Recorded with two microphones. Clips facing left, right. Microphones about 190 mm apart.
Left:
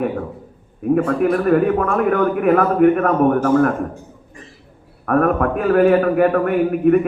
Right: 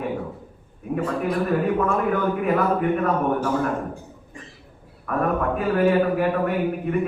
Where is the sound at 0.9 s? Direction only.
55° left (ahead or behind).